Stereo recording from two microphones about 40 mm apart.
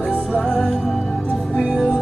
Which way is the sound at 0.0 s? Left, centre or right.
Centre.